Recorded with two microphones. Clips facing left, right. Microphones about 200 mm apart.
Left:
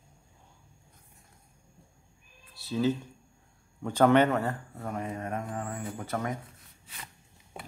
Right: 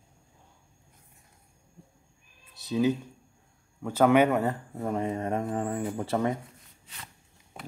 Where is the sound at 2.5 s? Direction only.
20° right (ahead or behind).